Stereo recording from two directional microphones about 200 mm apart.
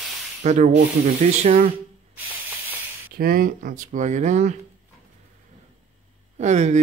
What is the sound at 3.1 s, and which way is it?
Speech, 45° right (ahead or behind).